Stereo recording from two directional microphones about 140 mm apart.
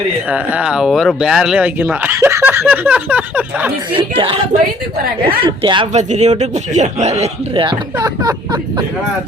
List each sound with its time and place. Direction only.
0.3 s speech: 10° right (ahead or behind)
3.9 s a woman's voice: 40° right (ahead or behind)
5.9 s a man's voice: 55° right (ahead or behind)
7.5 s speech: 35° right (ahead or behind)